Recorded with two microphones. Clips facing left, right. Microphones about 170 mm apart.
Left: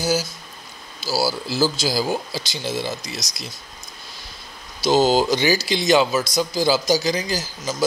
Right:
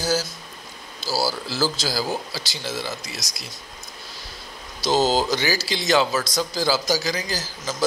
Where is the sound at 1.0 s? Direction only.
10° left (ahead or behind).